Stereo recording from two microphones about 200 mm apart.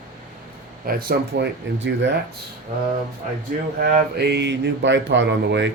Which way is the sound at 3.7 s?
50° right (ahead or behind).